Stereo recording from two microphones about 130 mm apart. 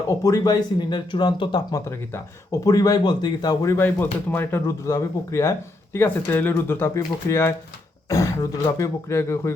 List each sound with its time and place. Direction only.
0.0 s speech: 25° left (ahead or behind)
1.9 s speech: 25° left (ahead or behind)